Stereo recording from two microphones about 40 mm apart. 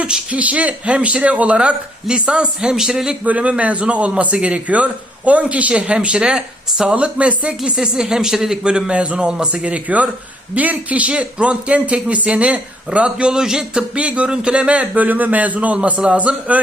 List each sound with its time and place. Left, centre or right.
0.3 s speech: right; by 3.1 s centre
3.2 s a man's voice: right; by 6.9 s centre
6.9 s a man's voice: right
7.6 s speech: centre
8.6 s a man's voice: right
9.6 s a man's voice: right
13.2 s speech: centre
13.9 s a man's voice: right